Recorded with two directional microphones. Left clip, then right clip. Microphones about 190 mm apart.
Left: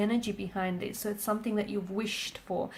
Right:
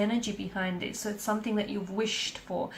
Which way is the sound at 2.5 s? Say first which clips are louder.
Left 1 dB; 40° left (ahead or behind).